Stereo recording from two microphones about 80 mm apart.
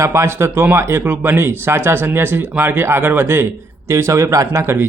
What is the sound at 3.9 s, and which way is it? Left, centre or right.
Speech, right.